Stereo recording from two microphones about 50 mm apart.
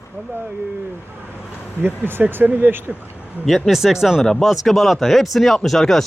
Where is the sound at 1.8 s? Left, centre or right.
Right.